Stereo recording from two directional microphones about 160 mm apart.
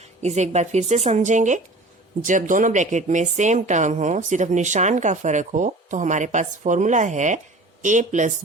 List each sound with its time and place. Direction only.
0.0 s speech: 45° right (ahead or behind)